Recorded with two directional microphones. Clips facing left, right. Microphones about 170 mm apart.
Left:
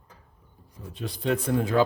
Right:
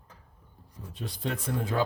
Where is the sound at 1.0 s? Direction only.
70° left (ahead or behind).